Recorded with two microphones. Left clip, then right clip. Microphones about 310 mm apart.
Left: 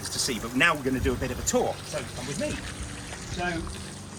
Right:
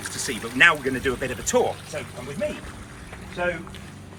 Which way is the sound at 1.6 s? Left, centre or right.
Right.